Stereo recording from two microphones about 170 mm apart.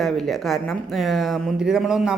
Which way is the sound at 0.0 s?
Centre (ahead or behind).